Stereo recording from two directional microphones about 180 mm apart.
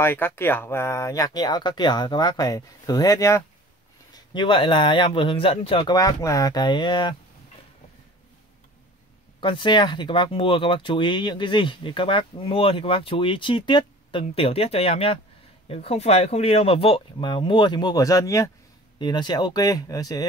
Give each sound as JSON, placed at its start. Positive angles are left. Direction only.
{"t": 0.0, "sound": "speech", "side_deg": 10}
{"t": 9.4, "sound": "speech", "side_deg": 25}